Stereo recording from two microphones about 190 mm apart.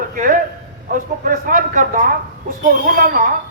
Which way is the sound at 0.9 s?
45° right (ahead or behind).